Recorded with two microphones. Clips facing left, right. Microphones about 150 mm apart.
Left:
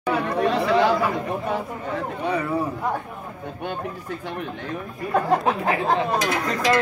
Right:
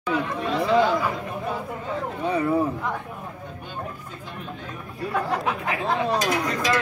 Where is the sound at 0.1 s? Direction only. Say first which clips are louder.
Left 4 dB; 75° left (ahead or behind).